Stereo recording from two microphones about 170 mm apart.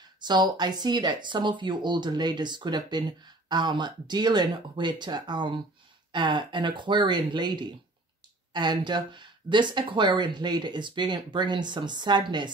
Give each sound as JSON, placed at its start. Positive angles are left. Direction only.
{"t": 0.2, "sound": "speech", "side_deg": -25}